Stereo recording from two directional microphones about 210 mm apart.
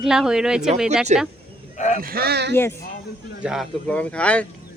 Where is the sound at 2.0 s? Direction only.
45° right (ahead or behind).